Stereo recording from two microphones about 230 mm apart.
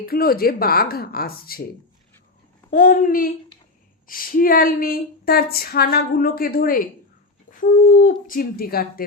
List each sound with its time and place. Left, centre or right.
0.0 s speech: left
2.6 s speech: left